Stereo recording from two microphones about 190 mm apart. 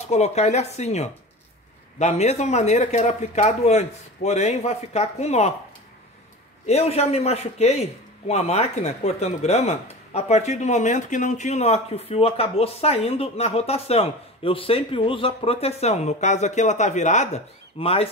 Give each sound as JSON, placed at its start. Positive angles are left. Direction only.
{"t": 0.1, "sound": "speech", "side_deg": 35}
{"t": 6.6, "sound": "speech", "side_deg": 35}